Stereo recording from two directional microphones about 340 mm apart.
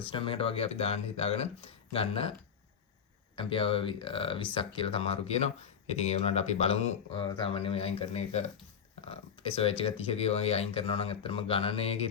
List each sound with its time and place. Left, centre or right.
0.1 s speech: centre
3.3 s speech: centre